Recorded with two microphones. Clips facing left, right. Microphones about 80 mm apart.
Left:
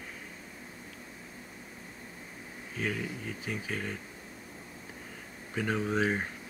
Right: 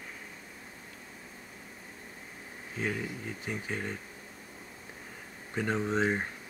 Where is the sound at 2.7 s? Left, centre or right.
Centre.